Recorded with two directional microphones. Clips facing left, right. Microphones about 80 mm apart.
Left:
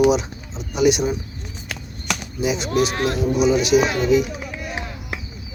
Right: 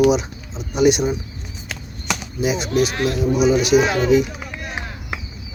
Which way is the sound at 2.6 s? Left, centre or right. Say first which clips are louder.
Even; left.